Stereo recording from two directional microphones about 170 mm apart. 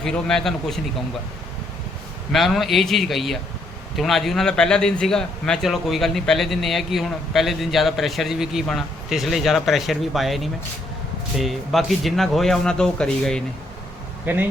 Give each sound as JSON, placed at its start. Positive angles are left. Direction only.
{"t": 0.0, "sound": "a man's voice", "side_deg": 5}
{"t": 2.3, "sound": "a man's voice", "side_deg": 0}
{"t": 14.3, "sound": "speech", "side_deg": -10}